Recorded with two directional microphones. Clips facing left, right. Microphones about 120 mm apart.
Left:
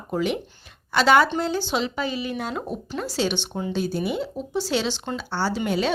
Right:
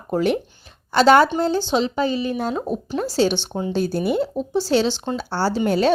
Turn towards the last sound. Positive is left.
turn(degrees=-40)  # may be behind; listen again after turning